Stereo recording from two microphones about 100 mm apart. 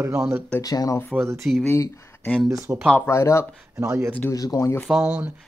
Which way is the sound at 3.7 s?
30° right (ahead or behind).